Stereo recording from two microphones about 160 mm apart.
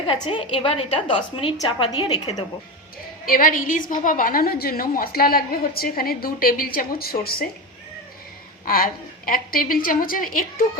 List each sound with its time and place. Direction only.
0.1 s a woman's voice: 35° left (ahead or behind)
3.2 s a woman's voice: 60° left (ahead or behind)
8.6 s a woman's voice: 65° left (ahead or behind)